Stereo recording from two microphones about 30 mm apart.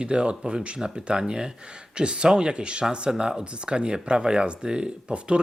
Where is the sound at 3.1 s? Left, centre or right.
Centre.